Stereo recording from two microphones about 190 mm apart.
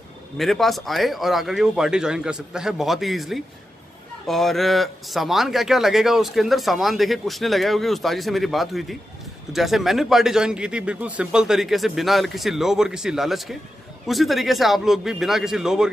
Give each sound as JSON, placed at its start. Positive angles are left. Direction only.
{"t": 0.4, "sound": "speech", "side_deg": 0}